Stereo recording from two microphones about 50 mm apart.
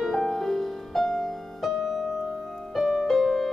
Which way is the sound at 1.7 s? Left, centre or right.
Centre.